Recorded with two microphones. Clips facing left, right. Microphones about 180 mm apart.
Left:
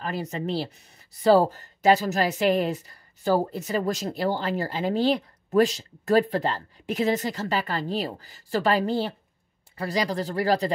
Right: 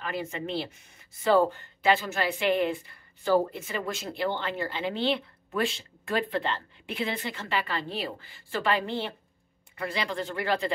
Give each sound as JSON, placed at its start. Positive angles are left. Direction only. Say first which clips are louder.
{"t": 0.0, "sound": "speech", "louder": "left 3 dB", "side_deg": 40}